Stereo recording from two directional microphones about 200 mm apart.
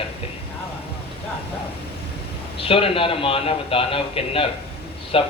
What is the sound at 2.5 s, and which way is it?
A man's voice, 25° left (ahead or behind).